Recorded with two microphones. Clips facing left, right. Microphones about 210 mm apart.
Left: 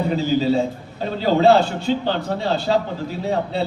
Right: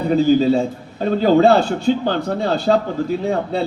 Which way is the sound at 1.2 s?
50° right (ahead or behind).